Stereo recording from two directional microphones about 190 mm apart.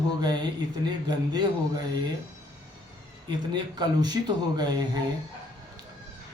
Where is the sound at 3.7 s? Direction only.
20° right (ahead or behind).